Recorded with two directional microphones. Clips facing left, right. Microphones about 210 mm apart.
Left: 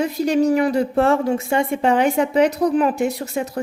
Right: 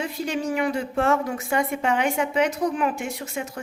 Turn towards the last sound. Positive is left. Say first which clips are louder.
# left 9 dB
turn(degrees=35)  # may be behind; listen again after turning